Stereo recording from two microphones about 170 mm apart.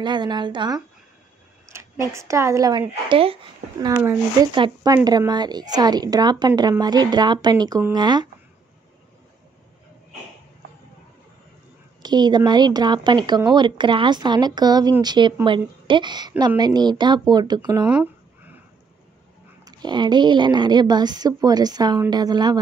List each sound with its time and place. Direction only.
0.0 s speech: 25° right (ahead or behind)
3.8 s speech: 20° right (ahead or behind)
12.0 s speech: 25° right (ahead or behind)
17.8 s a sound: 10° right (ahead or behind)
19.6 s speech: 25° right (ahead or behind)